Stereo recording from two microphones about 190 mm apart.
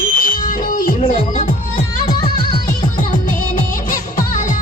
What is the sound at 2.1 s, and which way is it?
Music, 25° left (ahead or behind).